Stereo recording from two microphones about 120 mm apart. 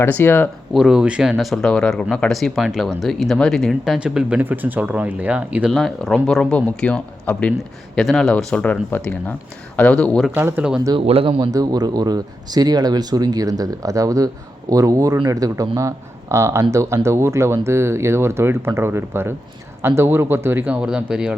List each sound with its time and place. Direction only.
0.0 s speech: 20° left (ahead or behind)
0.7 s speech: 5° right (ahead or behind)
5.7 s speech: centre (ahead or behind)
10.3 s speech: 15° right (ahead or behind)
10.9 s speech: 50° right (ahead or behind)
11.3 s speech: 30° right (ahead or behind); by 21.3 s 5° right (ahead or behind)